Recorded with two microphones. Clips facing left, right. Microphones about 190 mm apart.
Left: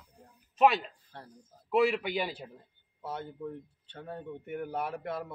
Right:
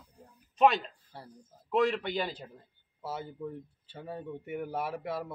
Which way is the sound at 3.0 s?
5° right (ahead or behind).